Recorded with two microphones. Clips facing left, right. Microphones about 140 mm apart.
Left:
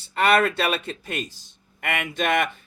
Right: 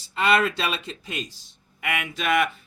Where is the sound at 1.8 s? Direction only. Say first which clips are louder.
Left 2 dB; 50° left (ahead or behind).